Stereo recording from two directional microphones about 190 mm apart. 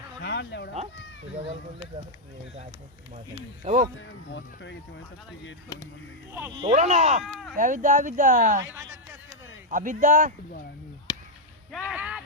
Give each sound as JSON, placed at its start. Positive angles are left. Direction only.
{"t": 0.2, "sound": "bow-wow", "side_deg": 70}
{"t": 3.6, "sound": "speech", "side_deg": -40}
{"t": 4.3, "sound": "speech", "side_deg": 70}
{"t": 5.6, "sound": "speech", "side_deg": 20}
{"t": 6.6, "sound": "speech", "side_deg": -35}
{"t": 9.6, "sound": "speech", "side_deg": -45}
{"t": 11.1, "sound": "a sound", "side_deg": 20}
{"t": 11.9, "sound": "speech", "side_deg": -5}